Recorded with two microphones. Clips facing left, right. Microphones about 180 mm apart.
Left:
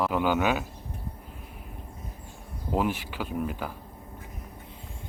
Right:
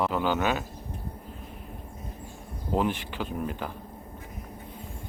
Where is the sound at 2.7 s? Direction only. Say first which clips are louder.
Even; 5° left (ahead or behind).